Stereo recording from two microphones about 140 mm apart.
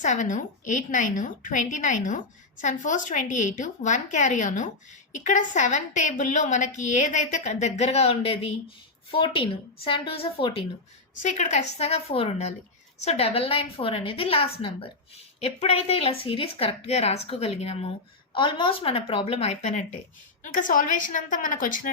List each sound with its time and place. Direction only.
0.0 s a woman's voice: 60° left (ahead or behind)
7.9 s a woman's voice: 45° left (ahead or behind)
11.2 s a woman's voice: 60° left (ahead or behind)
18.3 s a woman's voice: 35° left (ahead or behind); by 19.8 s 55° left (ahead or behind)
20.4 s a woman's voice: 65° left (ahead or behind)